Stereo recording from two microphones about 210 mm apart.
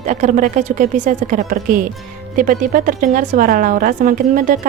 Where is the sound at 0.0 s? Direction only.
35° right (ahead or behind).